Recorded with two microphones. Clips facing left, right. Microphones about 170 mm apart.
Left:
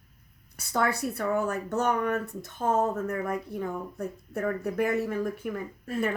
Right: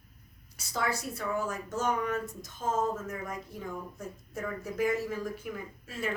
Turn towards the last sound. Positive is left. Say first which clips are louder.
# left 7 dB
turn(degrees=55)  # may be behind; listen again after turning